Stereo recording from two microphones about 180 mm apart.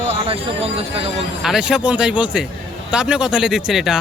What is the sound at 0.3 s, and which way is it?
Speech, 30° right (ahead or behind).